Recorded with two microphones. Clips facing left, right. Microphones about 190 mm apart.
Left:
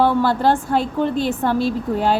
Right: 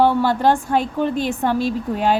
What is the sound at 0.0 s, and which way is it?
A woman's voice, 15° right (ahead or behind).